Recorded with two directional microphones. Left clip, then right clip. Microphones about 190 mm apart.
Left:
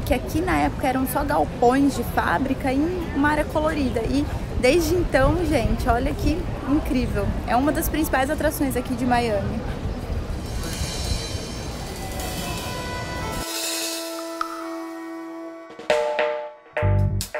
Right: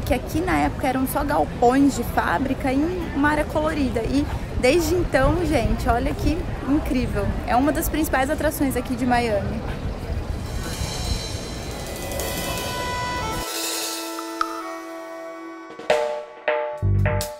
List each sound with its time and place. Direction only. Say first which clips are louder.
0.1 s speech: even; 5° right (ahead or behind)
12.4 s music: right 3 dB; centre (ahead or behind)
15.9 s drum: right 1 dB; centre (ahead or behind)